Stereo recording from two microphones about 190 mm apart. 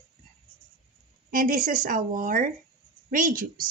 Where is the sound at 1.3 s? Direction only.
45° right (ahead or behind).